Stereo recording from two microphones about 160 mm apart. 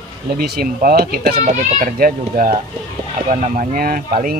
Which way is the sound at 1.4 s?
60° right (ahead or behind).